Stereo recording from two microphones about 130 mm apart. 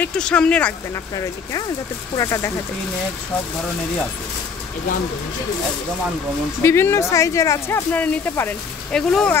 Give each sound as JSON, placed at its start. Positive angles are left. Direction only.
{"t": 0.0, "sound": "speech", "side_deg": 5}
{"t": 2.1, "sound": "speech", "side_deg": 25}
{"t": 6.6, "sound": "speech", "side_deg": 20}